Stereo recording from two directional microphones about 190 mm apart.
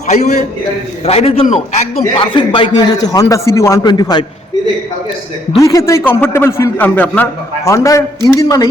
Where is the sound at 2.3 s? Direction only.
25° left (ahead or behind).